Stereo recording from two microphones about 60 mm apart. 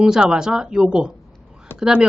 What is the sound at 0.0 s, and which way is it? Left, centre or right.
Speech, centre.